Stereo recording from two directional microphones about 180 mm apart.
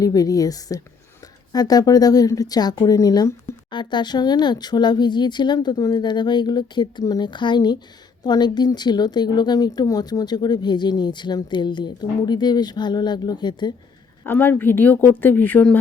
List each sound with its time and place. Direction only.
0.0 s a woman's voice: 20° left (ahead or behind)
14.3 s a woman's voice: 10° left (ahead or behind)